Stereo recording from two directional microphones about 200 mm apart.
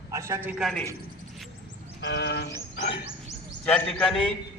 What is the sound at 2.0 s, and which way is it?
Vehicle, 55° left (ahead or behind).